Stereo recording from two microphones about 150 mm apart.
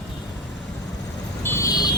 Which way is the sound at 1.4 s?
15° left (ahead or behind).